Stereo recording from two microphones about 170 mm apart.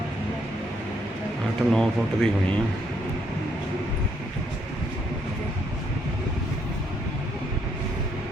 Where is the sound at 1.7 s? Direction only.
5° left (ahead or behind).